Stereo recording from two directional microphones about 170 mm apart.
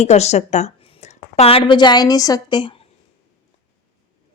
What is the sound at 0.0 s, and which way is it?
A woman's voice, 40° left (ahead or behind).